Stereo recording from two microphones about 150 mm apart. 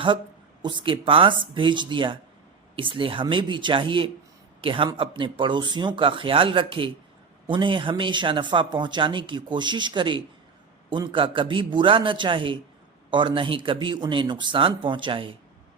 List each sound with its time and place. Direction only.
0.6 s speech: 30° right (ahead or behind)